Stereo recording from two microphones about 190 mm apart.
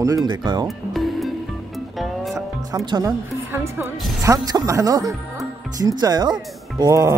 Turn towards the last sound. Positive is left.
turn(degrees=-15)  # may be behind; listen again after turning